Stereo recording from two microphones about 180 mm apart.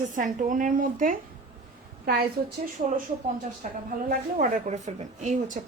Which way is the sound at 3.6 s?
45° right (ahead or behind).